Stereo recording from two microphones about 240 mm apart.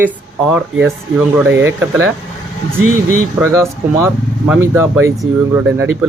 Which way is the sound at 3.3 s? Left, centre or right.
Centre.